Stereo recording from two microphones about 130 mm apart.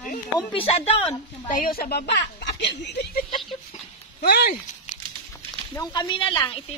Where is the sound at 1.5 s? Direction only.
90° left.